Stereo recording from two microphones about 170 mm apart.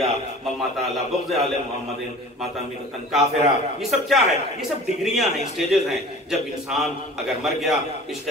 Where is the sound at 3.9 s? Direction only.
Centre (ahead or behind).